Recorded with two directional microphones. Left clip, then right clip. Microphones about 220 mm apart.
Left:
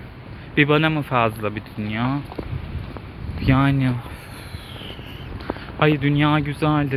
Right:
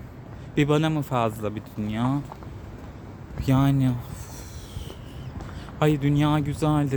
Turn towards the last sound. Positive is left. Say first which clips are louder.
# left 4 dB
turn(degrees=-15)  # may be behind; listen again after turning